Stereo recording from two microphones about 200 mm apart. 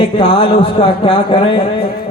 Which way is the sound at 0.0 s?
25° left (ahead or behind).